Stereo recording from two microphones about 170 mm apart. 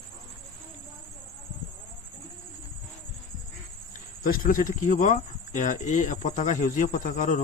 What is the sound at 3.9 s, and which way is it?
Speech, 50° left (ahead or behind).